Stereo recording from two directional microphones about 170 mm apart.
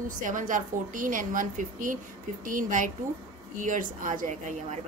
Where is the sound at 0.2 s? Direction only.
50° right (ahead or behind).